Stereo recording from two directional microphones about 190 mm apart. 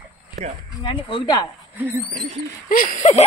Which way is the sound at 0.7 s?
20° left (ahead or behind).